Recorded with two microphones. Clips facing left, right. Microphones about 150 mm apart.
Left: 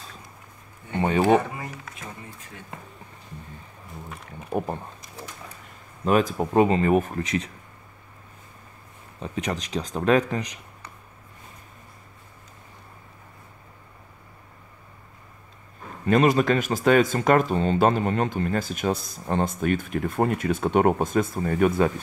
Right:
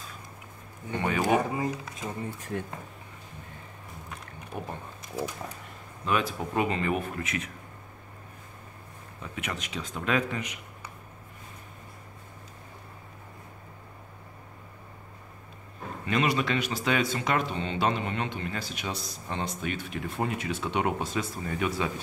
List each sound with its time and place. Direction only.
1.5 s speech: 20° right (ahead or behind)
4.5 s speech: 45° left (ahead or behind)
6.0 s speech: 40° left (ahead or behind)
9.2 s speech: 35° left (ahead or behind)
16.1 s speech: 45° left (ahead or behind)